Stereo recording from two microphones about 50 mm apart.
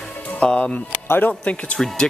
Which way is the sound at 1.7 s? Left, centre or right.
Centre.